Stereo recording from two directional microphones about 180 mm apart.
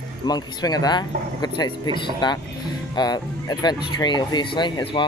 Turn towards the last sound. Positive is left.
turn(degrees=25)  # may be behind; listen again after turning